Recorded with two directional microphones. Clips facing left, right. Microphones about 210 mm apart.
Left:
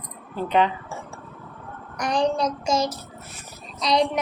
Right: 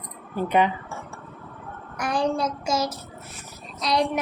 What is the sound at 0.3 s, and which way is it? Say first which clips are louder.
Speech: even; 10° right (ahead or behind).